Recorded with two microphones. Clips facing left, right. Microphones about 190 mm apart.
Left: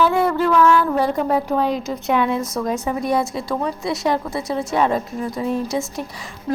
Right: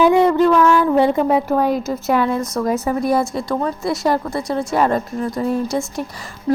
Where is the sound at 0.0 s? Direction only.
15° right (ahead or behind).